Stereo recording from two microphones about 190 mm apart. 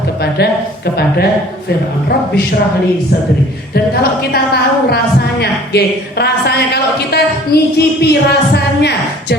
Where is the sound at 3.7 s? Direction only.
55° left (ahead or behind).